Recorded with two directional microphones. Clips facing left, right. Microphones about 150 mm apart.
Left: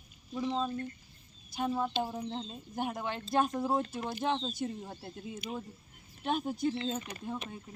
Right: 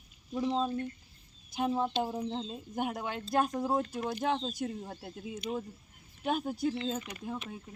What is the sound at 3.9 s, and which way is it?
Speech, 5° left (ahead or behind).